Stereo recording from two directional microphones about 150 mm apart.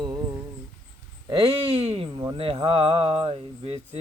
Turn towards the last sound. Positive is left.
turn(degrees=-45)  # may be behind; listen again after turning